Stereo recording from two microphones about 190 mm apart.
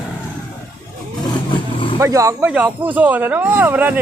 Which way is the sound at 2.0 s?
15° right (ahead or behind).